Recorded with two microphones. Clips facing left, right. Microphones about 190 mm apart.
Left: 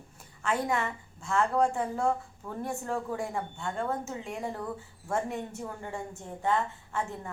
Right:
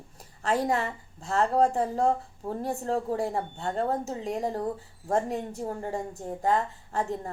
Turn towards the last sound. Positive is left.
turn(degrees=-35)  # may be behind; listen again after turning